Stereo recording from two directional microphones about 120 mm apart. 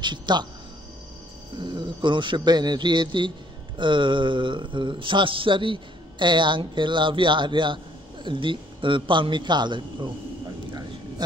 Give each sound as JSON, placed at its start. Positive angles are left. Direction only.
{"t": 0.0, "sound": "a man's voice", "side_deg": -40}
{"t": 1.6, "sound": "a man's voice", "side_deg": -40}